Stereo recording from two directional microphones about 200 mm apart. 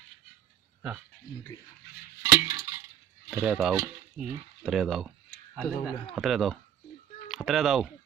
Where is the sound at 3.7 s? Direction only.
15° right (ahead or behind).